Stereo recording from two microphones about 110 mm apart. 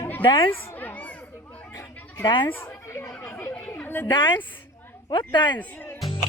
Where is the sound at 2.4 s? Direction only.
20° left (ahead or behind).